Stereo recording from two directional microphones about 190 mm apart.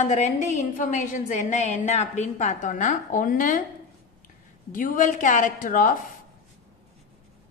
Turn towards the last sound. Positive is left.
turn(degrees=45)  # may be behind; listen again after turning